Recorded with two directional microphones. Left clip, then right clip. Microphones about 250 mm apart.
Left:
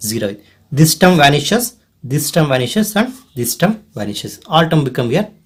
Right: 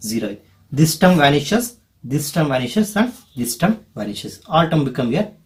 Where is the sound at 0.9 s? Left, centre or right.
Left.